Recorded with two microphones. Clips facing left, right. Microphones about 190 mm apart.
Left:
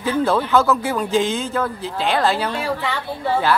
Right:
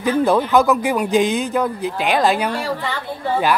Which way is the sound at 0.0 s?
15° right (ahead or behind).